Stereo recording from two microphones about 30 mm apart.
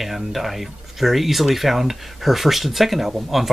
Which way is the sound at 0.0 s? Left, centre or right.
Centre.